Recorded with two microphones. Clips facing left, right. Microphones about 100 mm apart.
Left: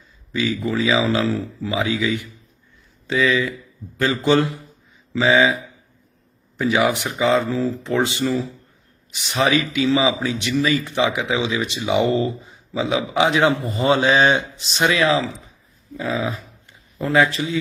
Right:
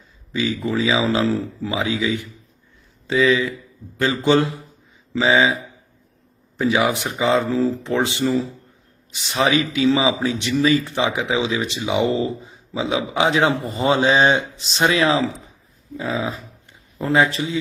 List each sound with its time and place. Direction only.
0.3 s a man's voice: 25° right (ahead or behind)
0.7 s speech: 10° right (ahead or behind)
1.0 s a man's voice: 30° right (ahead or behind)
6.7 s a man's voice: 20° right (ahead or behind)